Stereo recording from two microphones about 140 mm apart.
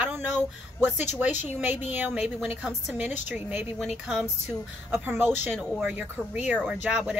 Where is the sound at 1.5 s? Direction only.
15° right (ahead or behind).